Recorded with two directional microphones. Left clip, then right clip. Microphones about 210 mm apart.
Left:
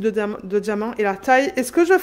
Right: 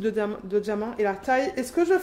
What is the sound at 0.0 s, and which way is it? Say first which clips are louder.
A woman's voice: left 5 dB; 30° left (ahead or behind).